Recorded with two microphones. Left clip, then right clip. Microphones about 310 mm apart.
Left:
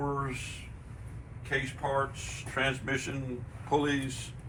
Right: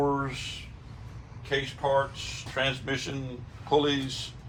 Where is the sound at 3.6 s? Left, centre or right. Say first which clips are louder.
Right 4 dB; right.